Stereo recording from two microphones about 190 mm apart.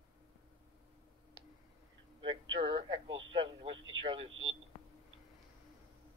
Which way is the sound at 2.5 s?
25° right (ahead or behind).